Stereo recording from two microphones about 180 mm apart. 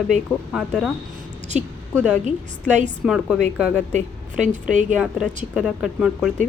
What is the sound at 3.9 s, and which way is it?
Speech, 45° right (ahead or behind).